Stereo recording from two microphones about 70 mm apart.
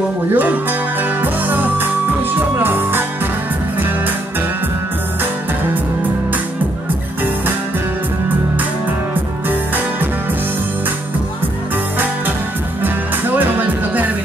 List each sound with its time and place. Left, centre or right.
0.3 s music: right
9.5 s music: right
12.8 s music: right